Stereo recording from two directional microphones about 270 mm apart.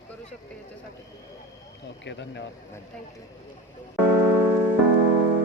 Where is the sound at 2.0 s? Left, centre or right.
Left.